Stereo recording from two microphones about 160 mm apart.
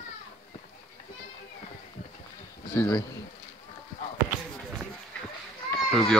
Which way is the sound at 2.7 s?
5° left (ahead or behind).